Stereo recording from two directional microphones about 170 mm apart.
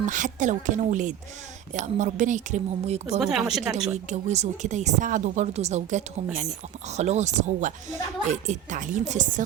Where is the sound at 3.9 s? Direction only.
40° right (ahead or behind).